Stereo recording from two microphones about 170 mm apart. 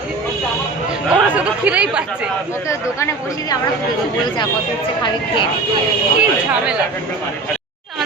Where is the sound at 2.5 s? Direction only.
15° left (ahead or behind).